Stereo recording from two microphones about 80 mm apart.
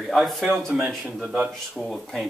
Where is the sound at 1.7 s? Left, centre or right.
Centre.